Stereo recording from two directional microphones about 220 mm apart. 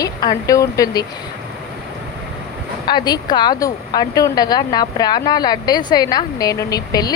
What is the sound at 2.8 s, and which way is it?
Speech, 20° left (ahead or behind).